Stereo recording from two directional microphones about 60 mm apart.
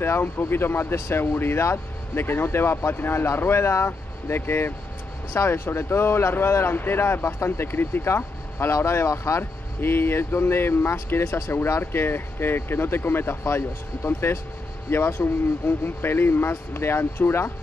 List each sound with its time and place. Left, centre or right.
0.0 s speech: left
9.4 s speech: left